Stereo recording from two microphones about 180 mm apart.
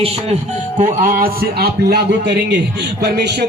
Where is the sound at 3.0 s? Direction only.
65° right (ahead or behind).